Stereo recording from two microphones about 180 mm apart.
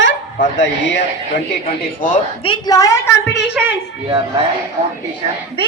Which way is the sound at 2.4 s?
20° left (ahead or behind).